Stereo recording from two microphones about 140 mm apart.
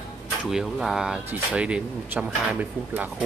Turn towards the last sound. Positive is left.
turn(degrees=-5)  # may be behind; listen again after turning